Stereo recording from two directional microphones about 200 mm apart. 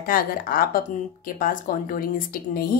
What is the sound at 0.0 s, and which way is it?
A woman's voice, 45° left (ahead or behind).